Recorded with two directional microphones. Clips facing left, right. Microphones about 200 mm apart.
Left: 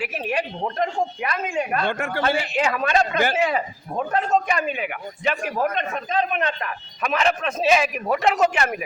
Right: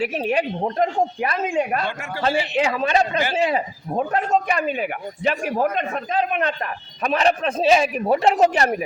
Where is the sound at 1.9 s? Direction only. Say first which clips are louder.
Left 5 dB; 55° left (ahead or behind).